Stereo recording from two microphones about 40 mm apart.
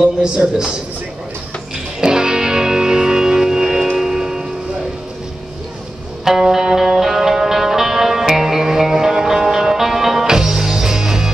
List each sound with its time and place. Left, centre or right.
0.0 s a man's voice: right
2.0 s music: centre
6.2 s music: centre